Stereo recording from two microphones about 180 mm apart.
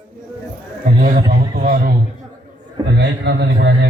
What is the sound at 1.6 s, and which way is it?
Speech, 55° right (ahead or behind).